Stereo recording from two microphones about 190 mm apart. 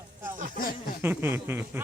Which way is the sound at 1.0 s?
10° right (ahead or behind).